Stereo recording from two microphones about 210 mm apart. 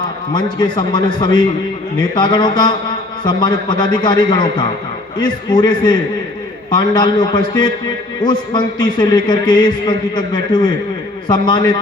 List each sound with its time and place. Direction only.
0.6 s a man's voice: 20° left (ahead or behind)